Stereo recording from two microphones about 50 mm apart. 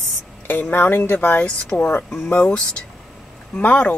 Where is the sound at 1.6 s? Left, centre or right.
Left.